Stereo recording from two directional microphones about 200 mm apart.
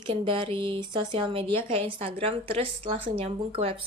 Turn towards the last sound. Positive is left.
turn(degrees=-30)  # may be behind; listen again after turning